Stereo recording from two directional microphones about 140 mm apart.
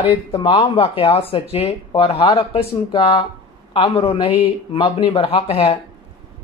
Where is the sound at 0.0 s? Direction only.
25° left (ahead or behind).